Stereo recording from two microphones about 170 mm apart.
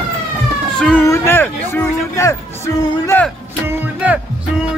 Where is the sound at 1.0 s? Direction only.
15° left (ahead or behind).